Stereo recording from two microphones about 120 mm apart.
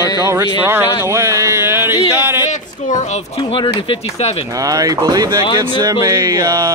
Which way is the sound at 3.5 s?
45° left (ahead or behind).